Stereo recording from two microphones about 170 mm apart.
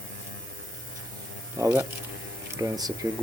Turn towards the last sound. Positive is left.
turn(degrees=-20)  # may be behind; listen again after turning